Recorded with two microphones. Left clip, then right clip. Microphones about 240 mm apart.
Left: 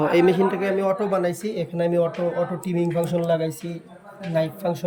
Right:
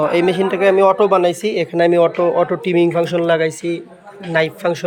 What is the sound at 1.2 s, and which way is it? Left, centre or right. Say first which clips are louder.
Speech: right 9 dB; centre.